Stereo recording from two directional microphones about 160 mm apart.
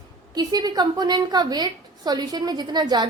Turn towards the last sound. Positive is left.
turn(degrees=-25)  # may be behind; listen again after turning